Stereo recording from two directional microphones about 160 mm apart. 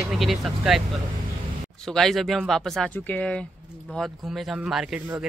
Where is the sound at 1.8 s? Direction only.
5° left (ahead or behind).